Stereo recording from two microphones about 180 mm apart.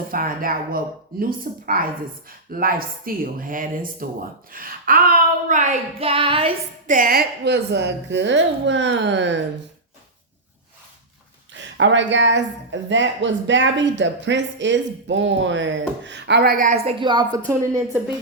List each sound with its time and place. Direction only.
0.1 s speech: 50° right (ahead or behind)
6.0 s child singing: 30° right (ahead or behind)
6.8 s a woman's voice: 50° right (ahead or behind); by 9.4 s 80° right
11.8 s speech: 90° right; by 16.7 s 50° right (ahead or behind)
16.8 s a woman's voice: 25° right (ahead or behind)
17.4 s a woman's voice: 10° right (ahead or behind)